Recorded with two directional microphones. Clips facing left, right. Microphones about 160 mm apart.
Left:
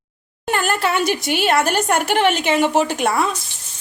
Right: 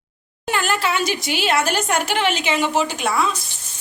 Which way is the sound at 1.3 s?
50° left (ahead or behind).